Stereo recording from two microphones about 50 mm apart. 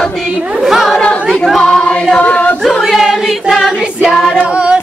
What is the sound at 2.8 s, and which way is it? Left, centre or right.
Music, centre.